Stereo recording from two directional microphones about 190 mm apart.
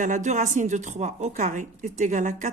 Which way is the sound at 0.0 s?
40° right (ahead or behind).